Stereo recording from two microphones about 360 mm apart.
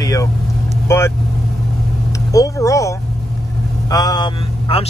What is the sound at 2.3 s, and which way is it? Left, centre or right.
Speech, centre.